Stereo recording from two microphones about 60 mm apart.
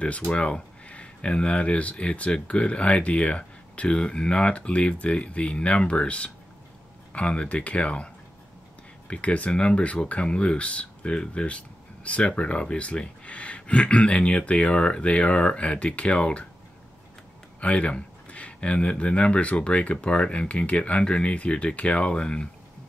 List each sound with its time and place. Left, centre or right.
0.0 s speech: centre
17.6 s speech: left